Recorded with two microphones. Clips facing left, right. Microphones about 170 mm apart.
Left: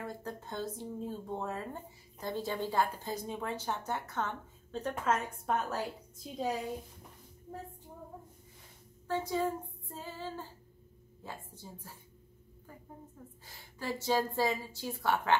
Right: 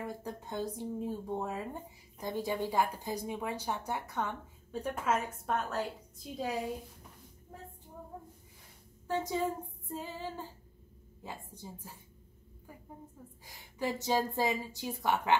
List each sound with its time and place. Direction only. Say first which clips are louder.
0.0 s speech: right 1 dB; 15° right (ahead or behind)
5.5 s a woman's voice: even; 5° left (ahead or behind)
9.0 s female singing: even; 15° right (ahead or behind)
11.2 s speech: right 1 dB; 15° right (ahead or behind)
13.5 s speech: right 3 dB; 15° right (ahead or behind)